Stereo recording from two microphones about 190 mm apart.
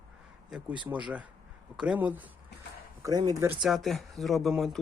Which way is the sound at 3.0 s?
20° right (ahead or behind).